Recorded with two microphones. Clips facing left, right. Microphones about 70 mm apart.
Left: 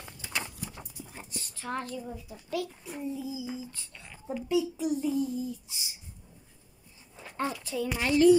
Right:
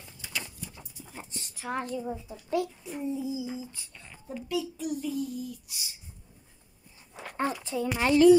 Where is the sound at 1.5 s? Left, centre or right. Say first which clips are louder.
Right 3 dB; centre.